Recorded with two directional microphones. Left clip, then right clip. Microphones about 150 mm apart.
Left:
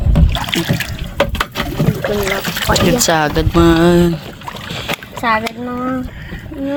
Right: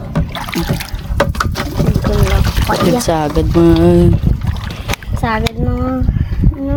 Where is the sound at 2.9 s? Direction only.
45° right (ahead or behind).